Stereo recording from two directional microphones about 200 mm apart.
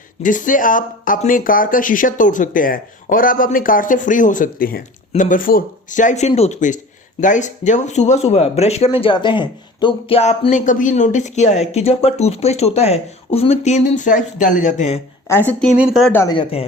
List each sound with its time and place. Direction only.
0.2 s speech: 40° left (ahead or behind)
15.3 s speech: 10° left (ahead or behind)
16.1 s speech: 20° left (ahead or behind)